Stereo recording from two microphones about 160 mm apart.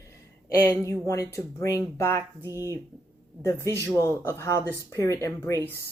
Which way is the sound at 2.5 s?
20° right (ahead or behind).